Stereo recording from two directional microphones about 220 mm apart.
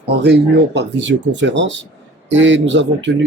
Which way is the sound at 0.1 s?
50° right (ahead or behind).